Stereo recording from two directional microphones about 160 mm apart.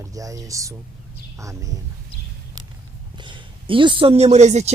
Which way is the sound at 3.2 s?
30° right (ahead or behind).